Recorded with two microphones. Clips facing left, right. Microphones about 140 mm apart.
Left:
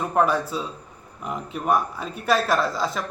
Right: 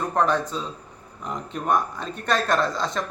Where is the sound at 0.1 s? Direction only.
10° left (ahead or behind).